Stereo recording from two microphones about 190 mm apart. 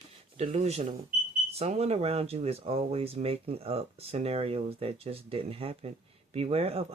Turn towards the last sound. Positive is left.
turn(degrees=-30)  # may be behind; listen again after turning